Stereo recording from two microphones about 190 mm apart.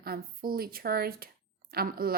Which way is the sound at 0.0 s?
50° right (ahead or behind).